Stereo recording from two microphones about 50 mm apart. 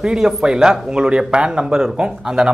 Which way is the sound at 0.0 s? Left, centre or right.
Centre.